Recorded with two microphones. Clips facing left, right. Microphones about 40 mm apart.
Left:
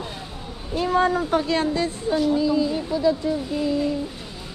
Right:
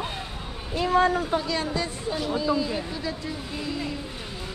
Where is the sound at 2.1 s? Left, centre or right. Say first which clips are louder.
Left 8 dB; centre.